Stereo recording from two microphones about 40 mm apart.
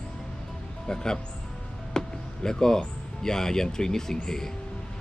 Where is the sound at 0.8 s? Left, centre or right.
Centre.